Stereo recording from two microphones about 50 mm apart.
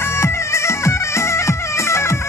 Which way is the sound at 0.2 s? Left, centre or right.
Left.